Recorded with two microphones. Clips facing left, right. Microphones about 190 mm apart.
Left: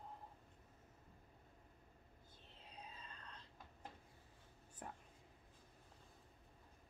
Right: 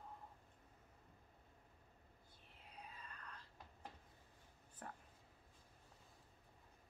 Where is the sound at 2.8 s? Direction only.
20° left (ahead or behind).